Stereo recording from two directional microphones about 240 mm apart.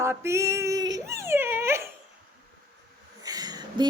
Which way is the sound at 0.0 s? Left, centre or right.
Centre.